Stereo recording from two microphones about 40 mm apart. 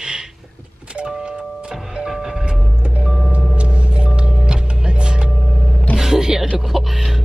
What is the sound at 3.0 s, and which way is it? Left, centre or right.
Vehicle, centre.